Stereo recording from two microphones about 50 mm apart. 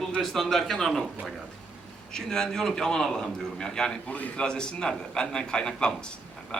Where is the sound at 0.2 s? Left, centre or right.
Centre.